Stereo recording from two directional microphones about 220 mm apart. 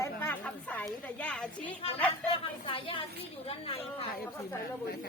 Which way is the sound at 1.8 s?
25° left (ahead or behind).